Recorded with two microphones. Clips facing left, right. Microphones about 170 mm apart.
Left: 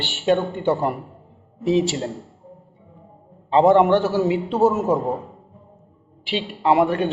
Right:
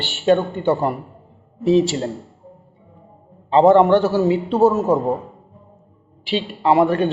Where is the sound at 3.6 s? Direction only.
20° left (ahead or behind).